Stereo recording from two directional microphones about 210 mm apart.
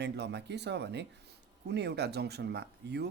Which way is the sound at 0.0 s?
55° right (ahead or behind).